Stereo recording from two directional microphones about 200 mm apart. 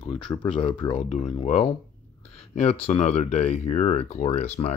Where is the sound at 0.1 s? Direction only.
25° left (ahead or behind).